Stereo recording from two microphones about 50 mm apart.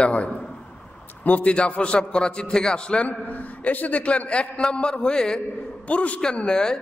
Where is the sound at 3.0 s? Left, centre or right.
Left; by 5.4 s centre.